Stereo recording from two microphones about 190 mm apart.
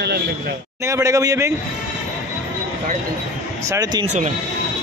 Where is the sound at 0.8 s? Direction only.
15° right (ahead or behind).